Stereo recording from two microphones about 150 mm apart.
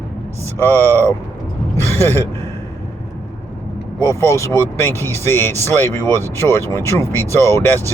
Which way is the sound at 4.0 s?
20° left (ahead or behind).